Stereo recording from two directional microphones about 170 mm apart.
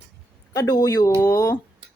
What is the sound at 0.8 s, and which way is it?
Speech, 20° left (ahead or behind).